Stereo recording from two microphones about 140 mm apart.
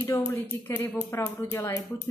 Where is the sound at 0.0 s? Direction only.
15° left (ahead or behind).